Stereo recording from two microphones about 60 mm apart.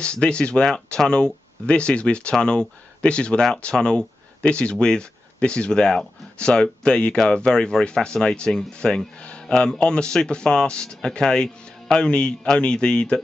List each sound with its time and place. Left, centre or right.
0.0 s speech: centre